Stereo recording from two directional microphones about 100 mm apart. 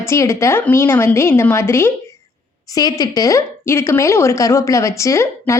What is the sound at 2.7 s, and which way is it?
Speech, 40° left (ahead or behind).